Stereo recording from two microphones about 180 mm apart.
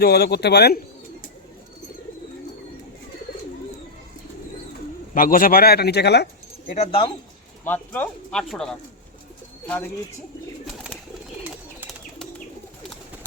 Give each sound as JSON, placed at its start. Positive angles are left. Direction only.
{"t": 0.0, "sound": "speech", "side_deg": 60}
{"t": 5.1, "sound": "speech", "side_deg": 50}
{"t": 6.7, "sound": "speech", "side_deg": 35}
{"t": 7.6, "sound": "speech", "side_deg": 10}